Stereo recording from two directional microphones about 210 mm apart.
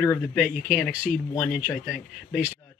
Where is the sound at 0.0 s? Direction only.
10° left (ahead or behind).